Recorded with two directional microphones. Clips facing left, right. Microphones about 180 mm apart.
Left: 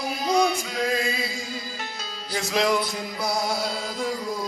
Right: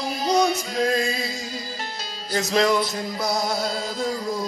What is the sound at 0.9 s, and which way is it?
Music, 5° left (ahead or behind).